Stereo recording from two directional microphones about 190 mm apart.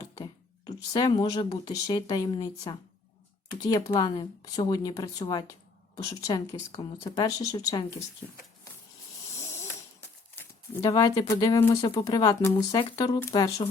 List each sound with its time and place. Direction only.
0.2 s speech: 20° left (ahead or behind)
9.3 s snoring: 15° left (ahead or behind)
10.3 s speech: 15° left (ahead or behind)